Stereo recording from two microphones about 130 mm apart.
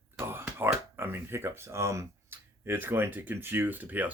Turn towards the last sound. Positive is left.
turn(degrees=-15)  # may be behind; listen again after turning